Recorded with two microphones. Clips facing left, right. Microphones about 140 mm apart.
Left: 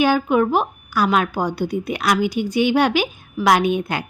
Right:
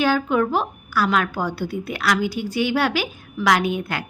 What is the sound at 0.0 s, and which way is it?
A woman's voice, 15° left (ahead or behind).